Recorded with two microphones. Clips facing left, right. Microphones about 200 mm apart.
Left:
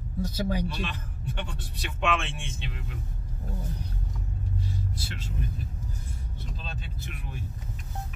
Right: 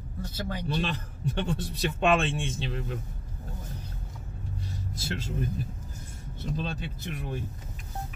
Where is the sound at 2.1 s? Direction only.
35° right (ahead or behind).